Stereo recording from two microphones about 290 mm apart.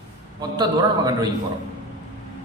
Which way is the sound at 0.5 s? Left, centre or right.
Centre.